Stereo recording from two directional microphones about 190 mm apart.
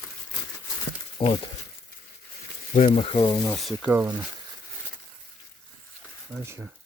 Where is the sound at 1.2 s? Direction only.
25° left (ahead or behind).